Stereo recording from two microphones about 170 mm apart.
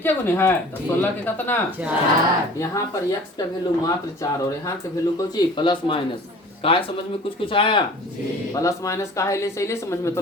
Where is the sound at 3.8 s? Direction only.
20° left (ahead or behind).